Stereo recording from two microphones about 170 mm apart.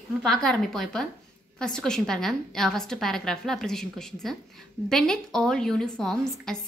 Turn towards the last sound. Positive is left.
turn(degrees=5)  # may be behind; listen again after turning